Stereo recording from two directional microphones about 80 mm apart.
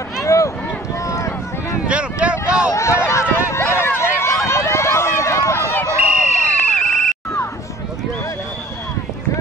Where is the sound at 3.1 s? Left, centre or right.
Left.